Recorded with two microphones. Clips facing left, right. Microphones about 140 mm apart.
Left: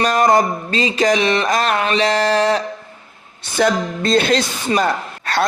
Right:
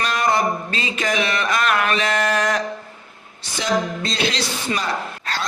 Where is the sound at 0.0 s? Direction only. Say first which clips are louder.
Left 6 dB; 45° left (ahead or behind).